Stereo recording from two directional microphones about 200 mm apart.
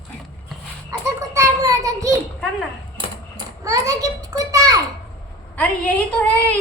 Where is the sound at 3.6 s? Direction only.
15° right (ahead or behind).